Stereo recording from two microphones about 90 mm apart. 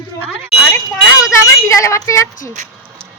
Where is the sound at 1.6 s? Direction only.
35° left (ahead or behind).